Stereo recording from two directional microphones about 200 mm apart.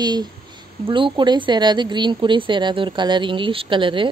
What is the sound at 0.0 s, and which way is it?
Speech, 20° right (ahead or behind).